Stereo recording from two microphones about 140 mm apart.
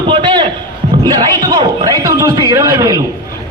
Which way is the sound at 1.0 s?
30° right (ahead or behind).